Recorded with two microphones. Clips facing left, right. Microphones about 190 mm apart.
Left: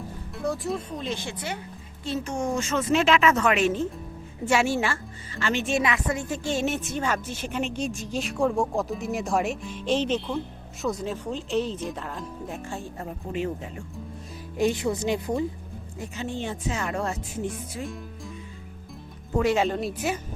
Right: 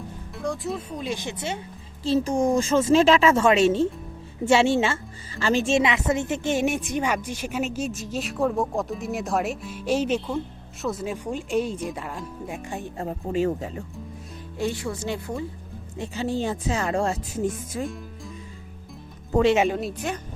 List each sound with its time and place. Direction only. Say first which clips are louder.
0.3 s a woman's voice: even; centre (ahead or behind); by 4.9 s 25° right (ahead or behind)
5.4 s a woman's voice: right 4 dB; 35° right (ahead or behind); by 12.6 s centre (ahead or behind)
12.6 s a woman's voice: right 2 dB; 15° right (ahead or behind)
13.0 s speech: right 7 dB; 35° right (ahead or behind)
14.6 s speech: left 4 dB; 20° left (ahead or behind)
16.0 s speech: right 5 dB; 35° right (ahead or behind)
19.3 s speech: right 4 dB; 25° right (ahead or behind)
19.6 s speech: right 2 dB; 5° right (ahead or behind)
19.9 s speech: left 1 dB; 5° left (ahead or behind)